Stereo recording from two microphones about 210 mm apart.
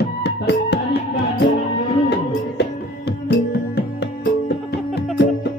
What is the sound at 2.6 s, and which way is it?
Music, 55° left (ahead or behind).